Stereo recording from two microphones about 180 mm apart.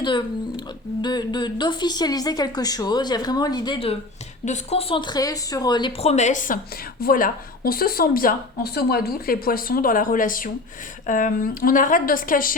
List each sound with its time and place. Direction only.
0.0 s speech: 25° left (ahead or behind); by 12.5 s 50° left (ahead or behind)